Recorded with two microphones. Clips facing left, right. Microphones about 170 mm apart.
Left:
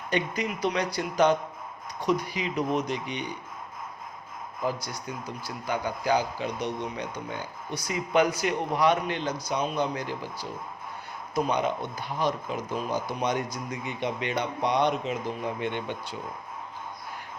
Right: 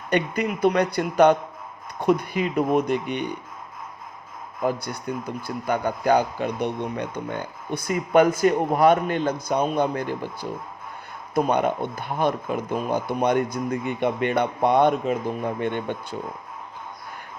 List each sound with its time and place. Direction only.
0.1 s a man's voice: 55° right (ahead or behind)
4.6 s a man's voice: 55° right (ahead or behind)
11.3 s a man's voice: 55° right (ahead or behind)